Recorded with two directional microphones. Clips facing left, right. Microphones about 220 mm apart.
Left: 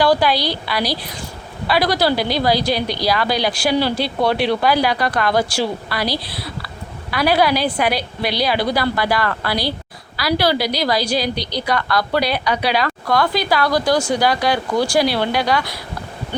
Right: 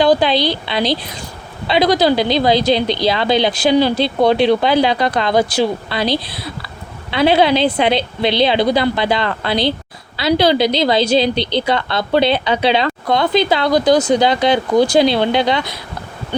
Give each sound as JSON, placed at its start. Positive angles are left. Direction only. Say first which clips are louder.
{"t": 0.0, "sound": "a woman's voice", "louder": "right 3 dB", "side_deg": -20}